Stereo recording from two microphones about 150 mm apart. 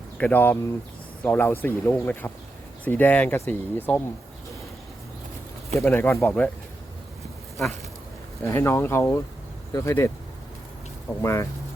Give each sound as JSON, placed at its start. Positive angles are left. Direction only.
{"t": 0.2, "sound": "speech", "side_deg": 10}
{"t": 5.8, "sound": "speech", "side_deg": 15}
{"t": 8.4, "sound": "speech", "side_deg": 20}
{"t": 11.2, "sound": "speech", "side_deg": 20}